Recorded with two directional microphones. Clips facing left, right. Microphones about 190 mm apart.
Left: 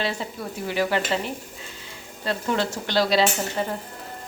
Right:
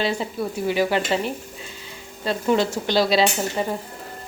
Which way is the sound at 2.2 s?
15° right (ahead or behind).